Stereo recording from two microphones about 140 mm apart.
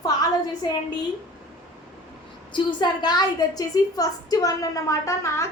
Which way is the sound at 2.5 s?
35° left (ahead or behind).